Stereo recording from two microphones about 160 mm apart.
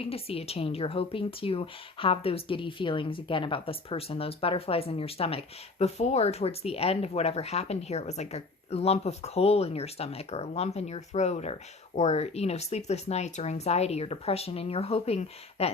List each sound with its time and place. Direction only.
0.0 s speech: 35° left (ahead or behind)